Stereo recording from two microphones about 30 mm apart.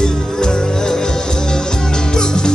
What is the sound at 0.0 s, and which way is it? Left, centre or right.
Music, left.